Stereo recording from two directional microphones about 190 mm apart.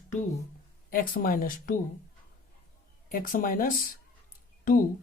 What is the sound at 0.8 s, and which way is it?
Speech, 50° left (ahead or behind).